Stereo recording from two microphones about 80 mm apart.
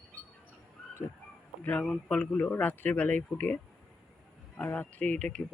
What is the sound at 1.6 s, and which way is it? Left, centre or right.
Speech, centre.